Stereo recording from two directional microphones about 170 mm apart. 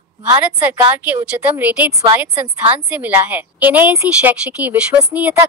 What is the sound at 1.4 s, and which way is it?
A woman's voice, 10° right (ahead or behind).